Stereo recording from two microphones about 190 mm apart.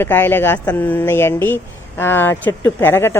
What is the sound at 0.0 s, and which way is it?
Speech, 10° left (ahead or behind).